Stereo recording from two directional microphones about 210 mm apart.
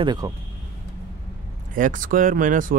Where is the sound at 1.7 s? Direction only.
40° right (ahead or behind).